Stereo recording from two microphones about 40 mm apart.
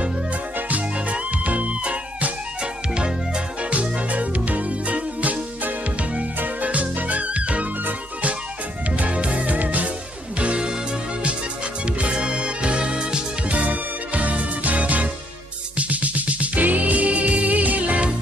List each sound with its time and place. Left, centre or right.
0.6 s music: right
2.9 s music: right
3.7 s music: right
8.9 s music: right
10.4 s music: right
11.8 s music: right